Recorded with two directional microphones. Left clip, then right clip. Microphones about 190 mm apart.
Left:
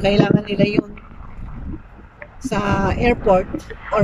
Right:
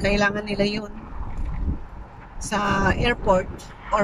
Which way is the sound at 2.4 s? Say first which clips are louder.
Left 2 dB; 5° left (ahead or behind).